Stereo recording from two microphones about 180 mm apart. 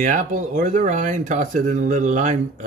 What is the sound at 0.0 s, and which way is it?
Speech, 45° right (ahead or behind).